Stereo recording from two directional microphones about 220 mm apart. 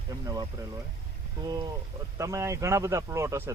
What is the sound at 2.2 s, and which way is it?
Speech, 15° right (ahead or behind).